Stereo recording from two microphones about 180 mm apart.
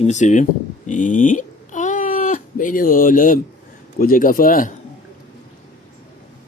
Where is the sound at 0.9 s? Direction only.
45° left (ahead or behind).